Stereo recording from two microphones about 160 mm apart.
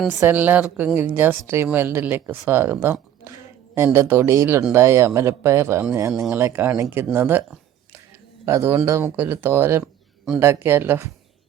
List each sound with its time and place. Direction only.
0.2 s speech: 10° right (ahead or behind)
8.4 s speech: 15° right (ahead or behind)